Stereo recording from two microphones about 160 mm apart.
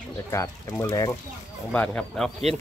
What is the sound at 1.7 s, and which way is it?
Speech, 5° left (ahead or behind).